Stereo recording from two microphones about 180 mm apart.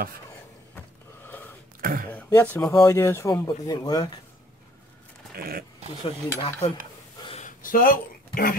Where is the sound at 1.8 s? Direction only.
55° right (ahead or behind).